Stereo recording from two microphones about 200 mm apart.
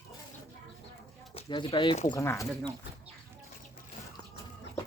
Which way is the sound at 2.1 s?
15° left (ahead or behind).